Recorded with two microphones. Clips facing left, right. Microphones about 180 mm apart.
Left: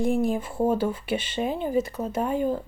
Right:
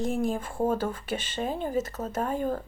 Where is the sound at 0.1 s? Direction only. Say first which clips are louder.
Left 4 dB; 40° right (ahead or behind).